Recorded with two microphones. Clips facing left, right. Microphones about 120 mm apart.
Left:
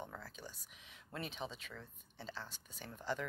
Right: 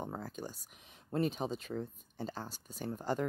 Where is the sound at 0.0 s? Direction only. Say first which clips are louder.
Right 8 dB; 45° right (ahead or behind).